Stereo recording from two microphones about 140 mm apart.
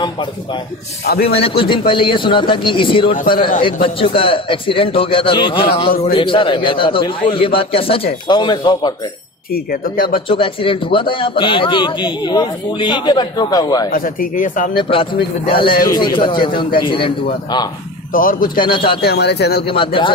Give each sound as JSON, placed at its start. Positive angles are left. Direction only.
{"t": 0.0, "sound": "a man's voice", "side_deg": 35}
{"t": 3.1, "sound": "speech", "side_deg": 80}
{"t": 3.8, "sound": "a man's voice", "side_deg": 40}
{"t": 9.5, "sound": "speech", "side_deg": 90}
{"t": 10.2, "sound": "a man's voice", "side_deg": 40}
{"t": 13.9, "sound": "speech", "side_deg": 90}
{"t": 14.7, "sound": "a man's voice", "side_deg": 40}
{"t": 18.1, "sound": "speech", "side_deg": 85}
{"t": 18.6, "sound": "a man's voice", "side_deg": 35}